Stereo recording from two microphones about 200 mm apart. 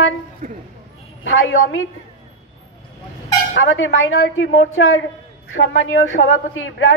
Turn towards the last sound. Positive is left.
turn(degrees=70)  # may be behind; listen again after turning